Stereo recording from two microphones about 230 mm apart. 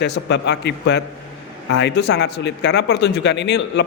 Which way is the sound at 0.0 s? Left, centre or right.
Left.